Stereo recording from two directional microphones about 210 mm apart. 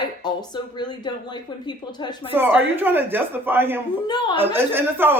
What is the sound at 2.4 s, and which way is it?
Speech, 10° right (ahead or behind).